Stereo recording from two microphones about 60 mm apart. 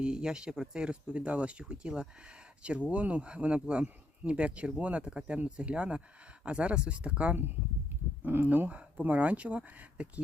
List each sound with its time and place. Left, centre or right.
0.0 s speech: centre
8.3 s speech: right